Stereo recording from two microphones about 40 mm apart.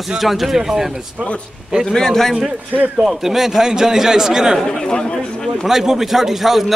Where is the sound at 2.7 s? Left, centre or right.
Right.